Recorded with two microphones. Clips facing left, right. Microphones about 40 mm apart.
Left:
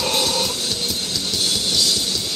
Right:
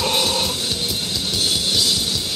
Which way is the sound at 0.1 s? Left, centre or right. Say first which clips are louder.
Right 1 dB; right.